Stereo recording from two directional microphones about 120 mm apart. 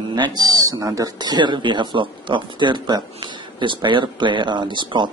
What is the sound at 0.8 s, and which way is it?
Speech, 30° right (ahead or behind).